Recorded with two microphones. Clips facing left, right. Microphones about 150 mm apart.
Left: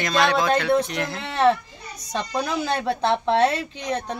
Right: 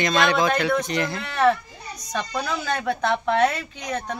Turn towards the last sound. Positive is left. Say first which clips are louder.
# left 3 dB
turn(degrees=30)  # may be behind; listen again after turning